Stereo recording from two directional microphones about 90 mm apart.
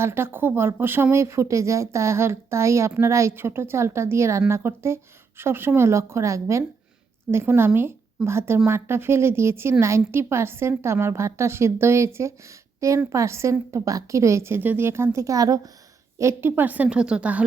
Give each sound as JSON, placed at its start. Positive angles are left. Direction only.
{"t": 0.0, "sound": "a woman's voice", "side_deg": -25}
{"t": 16.1, "sound": "a woman's voice", "side_deg": -30}